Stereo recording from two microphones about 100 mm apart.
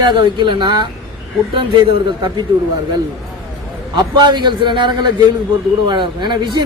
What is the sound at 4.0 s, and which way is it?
A man's voice, 50° right (ahead or behind).